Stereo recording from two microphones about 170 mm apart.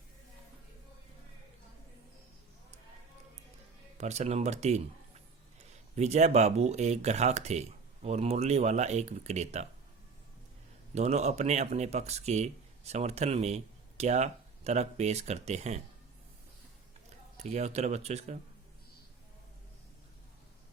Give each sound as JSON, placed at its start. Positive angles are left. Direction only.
{"t": 3.9, "sound": "speech", "side_deg": -40}
{"t": 10.9, "sound": "speech", "side_deg": -40}
{"t": 17.3, "sound": "speech", "side_deg": -40}